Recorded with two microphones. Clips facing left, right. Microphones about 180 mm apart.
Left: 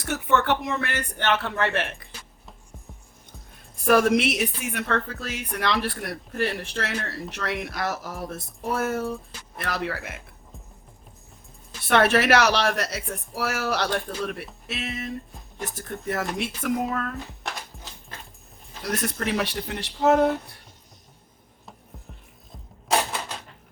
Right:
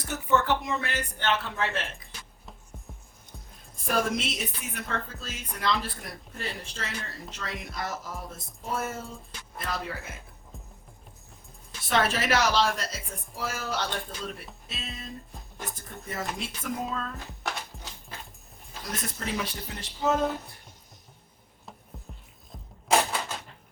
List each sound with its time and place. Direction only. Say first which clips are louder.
0.0 s a man's voice: left 3 dB; 70° left (ahead or behind)
3.8 s a woman's voice: left 9 dB; 70° left (ahead or behind)
11.9 s a woman's voice: left 7 dB; 65° left (ahead or behind)
18.9 s a woman's voice: left 7 dB; 70° left (ahead or behind)